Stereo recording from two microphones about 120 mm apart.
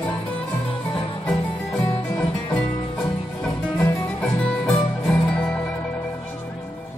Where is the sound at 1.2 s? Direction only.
10° left (ahead or behind).